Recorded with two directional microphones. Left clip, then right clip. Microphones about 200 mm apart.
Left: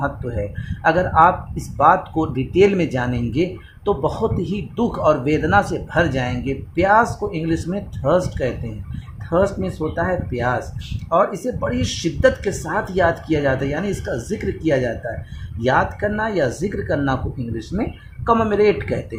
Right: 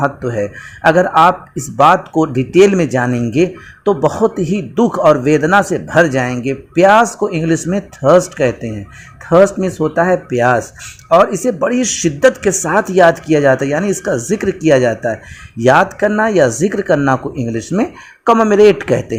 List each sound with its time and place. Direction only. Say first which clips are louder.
0.8 s speech: right 5 dB; 25° right (ahead or behind)
9.3 s speech: right 9 dB; 30° right (ahead or behind)
18.3 s speech: right 7 dB; 25° right (ahead or behind)